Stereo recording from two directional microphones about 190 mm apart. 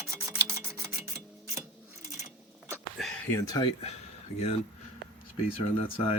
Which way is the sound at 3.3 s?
20° left (ahead or behind).